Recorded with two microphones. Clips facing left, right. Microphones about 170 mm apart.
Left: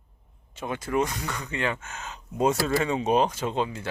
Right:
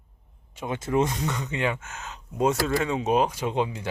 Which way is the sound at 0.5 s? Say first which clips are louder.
Right 2 dB; 20° right (ahead or behind).